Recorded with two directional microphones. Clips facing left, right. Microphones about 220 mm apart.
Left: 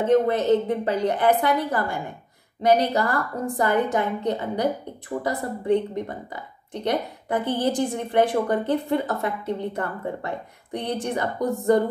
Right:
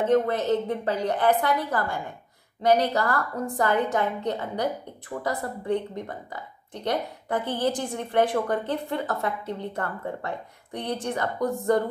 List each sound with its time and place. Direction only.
0.1 s a woman's voice: 15° left (ahead or behind)